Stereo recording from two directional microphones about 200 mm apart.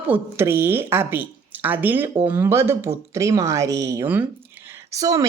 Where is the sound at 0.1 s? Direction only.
10° right (ahead or behind).